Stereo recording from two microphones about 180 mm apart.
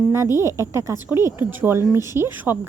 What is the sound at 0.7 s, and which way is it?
A woman's voice, 15° right (ahead or behind).